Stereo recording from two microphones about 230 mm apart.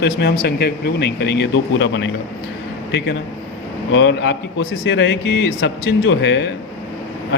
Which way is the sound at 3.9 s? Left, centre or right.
Left.